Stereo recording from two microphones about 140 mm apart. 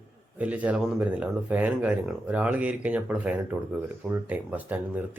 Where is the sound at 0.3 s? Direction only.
10° right (ahead or behind).